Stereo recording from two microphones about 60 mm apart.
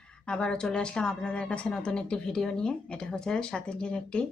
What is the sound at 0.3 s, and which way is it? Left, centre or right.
A woman's voice, centre.